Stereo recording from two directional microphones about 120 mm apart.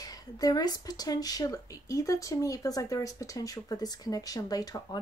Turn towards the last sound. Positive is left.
turn(degrees=30)  # may be behind; listen again after turning